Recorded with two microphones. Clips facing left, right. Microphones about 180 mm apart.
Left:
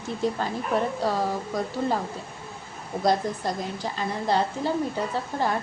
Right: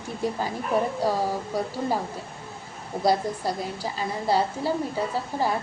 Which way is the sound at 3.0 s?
10° right (ahead or behind).